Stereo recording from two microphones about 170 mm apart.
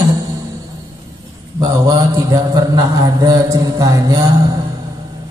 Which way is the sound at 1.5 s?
25° right (ahead or behind).